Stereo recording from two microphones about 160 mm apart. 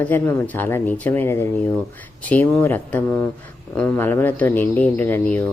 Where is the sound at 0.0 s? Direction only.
10° left (ahead or behind).